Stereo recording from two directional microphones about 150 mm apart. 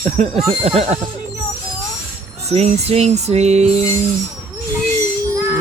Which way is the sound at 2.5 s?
45° right (ahead or behind).